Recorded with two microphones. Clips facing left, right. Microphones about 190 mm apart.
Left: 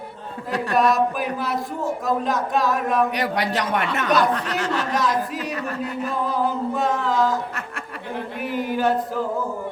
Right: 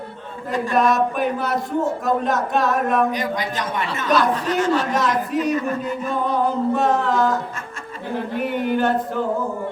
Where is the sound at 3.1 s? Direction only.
70° left (ahead or behind).